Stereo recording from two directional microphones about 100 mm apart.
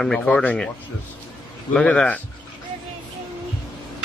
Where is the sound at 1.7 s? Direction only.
10° left (ahead or behind).